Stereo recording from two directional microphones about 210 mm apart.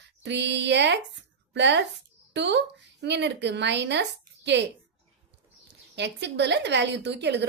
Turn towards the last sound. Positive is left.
turn(degrees=-55)  # may be behind; listen again after turning